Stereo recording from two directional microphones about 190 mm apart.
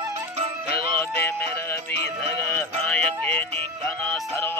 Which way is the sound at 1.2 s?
15° left (ahead or behind).